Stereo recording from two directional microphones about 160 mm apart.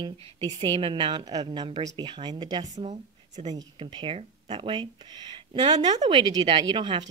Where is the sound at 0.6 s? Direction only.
35° right (ahead or behind).